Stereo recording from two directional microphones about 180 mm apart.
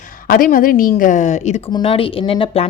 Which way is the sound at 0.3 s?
50° left (ahead or behind).